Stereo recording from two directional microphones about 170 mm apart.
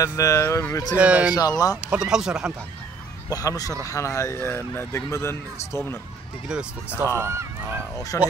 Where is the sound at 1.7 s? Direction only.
5° right (ahead or behind).